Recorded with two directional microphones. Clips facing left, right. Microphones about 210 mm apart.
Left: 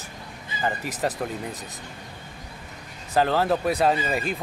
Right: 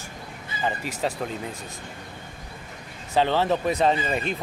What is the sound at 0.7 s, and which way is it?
Speech, 15° left (ahead or behind).